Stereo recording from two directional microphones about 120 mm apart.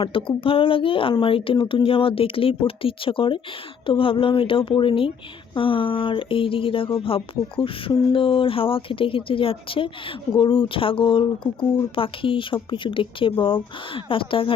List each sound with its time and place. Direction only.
0.0 s a woman's voice: 45° left (ahead or behind)